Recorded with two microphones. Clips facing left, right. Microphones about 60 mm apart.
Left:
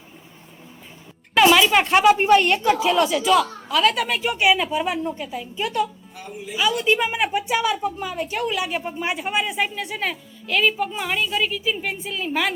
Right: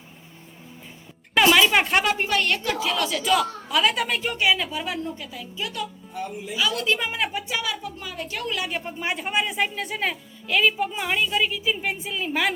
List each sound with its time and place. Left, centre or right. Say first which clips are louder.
1.4 s speech: left 2 dB; centre
2.2 s a woman's voice: left 8 dB; left
3.2 s speech: left 4 dB; centre; by 5.8 s left
6.6 s a woman's voice: left 4 dB; left
8.4 s a woman's voice: left 4 dB; centre